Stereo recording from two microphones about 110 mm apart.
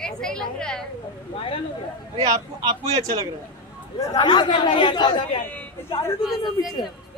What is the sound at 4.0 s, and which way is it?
Speech, 35° left (ahead or behind).